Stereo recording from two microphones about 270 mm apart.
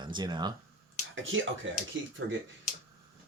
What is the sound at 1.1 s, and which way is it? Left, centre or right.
Speech, right.